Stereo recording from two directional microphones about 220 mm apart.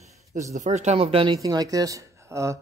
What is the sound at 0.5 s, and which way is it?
Speech, 35° right (ahead or behind).